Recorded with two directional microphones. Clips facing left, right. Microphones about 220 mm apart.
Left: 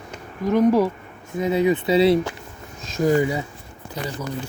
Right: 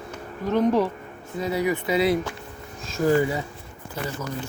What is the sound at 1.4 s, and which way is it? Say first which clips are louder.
Speech: left 5 dB; 20° left (ahead or behind).